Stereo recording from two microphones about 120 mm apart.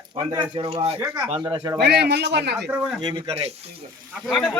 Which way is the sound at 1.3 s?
40° right (ahead or behind).